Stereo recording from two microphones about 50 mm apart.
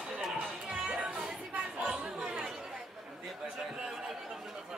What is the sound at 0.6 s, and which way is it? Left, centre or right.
Music, right.